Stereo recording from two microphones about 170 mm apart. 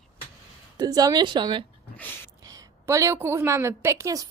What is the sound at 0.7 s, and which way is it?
A woman's voice, 25° right (ahead or behind).